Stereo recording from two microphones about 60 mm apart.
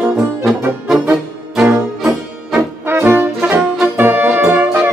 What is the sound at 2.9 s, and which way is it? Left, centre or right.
Brass instrument, right.